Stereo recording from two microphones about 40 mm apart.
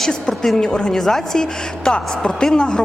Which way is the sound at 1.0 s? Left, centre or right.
Centre.